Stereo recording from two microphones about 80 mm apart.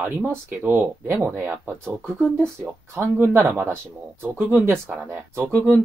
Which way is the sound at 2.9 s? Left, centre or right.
Right.